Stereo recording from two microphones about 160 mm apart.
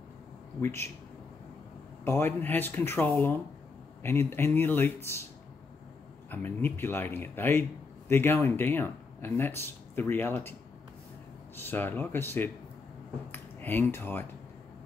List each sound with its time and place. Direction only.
0.6 s speech: 15° left (ahead or behind)
2.0 s speech: 15° left (ahead or behind)
6.3 s speech: 15° left (ahead or behind)
11.6 s speech: 10° left (ahead or behind)